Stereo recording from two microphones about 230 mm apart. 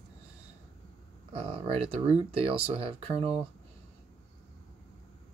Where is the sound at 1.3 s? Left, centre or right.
Right.